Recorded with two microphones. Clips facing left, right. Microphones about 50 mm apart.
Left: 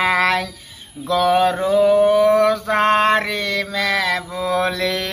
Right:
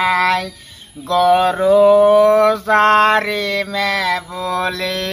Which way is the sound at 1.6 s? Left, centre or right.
Centre.